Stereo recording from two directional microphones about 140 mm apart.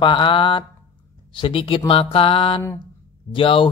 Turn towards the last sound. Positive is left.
turn(degrees=40)  # may be behind; listen again after turning